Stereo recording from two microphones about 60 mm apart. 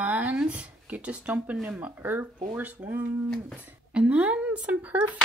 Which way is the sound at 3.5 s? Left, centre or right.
Centre.